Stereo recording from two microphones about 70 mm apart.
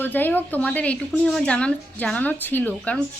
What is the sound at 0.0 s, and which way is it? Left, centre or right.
A woman's voice, left.